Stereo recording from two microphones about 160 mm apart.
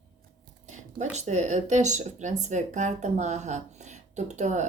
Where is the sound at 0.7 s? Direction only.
45° right (ahead or behind).